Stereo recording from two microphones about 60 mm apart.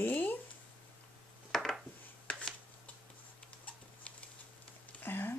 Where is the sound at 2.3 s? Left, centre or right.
Centre.